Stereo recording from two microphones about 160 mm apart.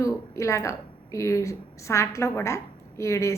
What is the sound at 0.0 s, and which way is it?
A woman's voice, 20° left (ahead or behind).